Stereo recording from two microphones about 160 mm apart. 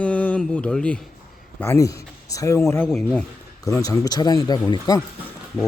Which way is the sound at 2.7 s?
5° left (ahead or behind).